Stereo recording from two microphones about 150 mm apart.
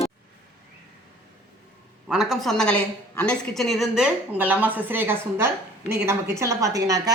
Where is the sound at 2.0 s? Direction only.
5° right (ahead or behind).